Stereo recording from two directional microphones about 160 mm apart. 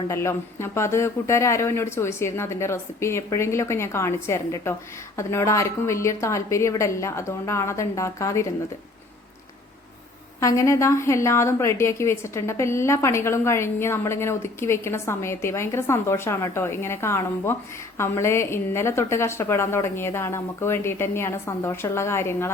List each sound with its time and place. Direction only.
0.1 s a woman's voice: 15° left (ahead or behind)
10.4 s a woman's voice: 20° left (ahead or behind)